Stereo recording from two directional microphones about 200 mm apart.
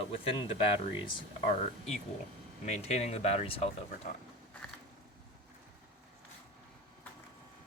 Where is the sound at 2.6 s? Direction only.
35° left (ahead or behind).